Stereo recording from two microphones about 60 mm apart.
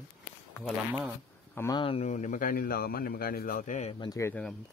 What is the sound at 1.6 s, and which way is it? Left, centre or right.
Speech, left.